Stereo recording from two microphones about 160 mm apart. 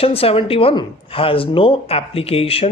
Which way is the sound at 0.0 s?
40° left (ahead or behind).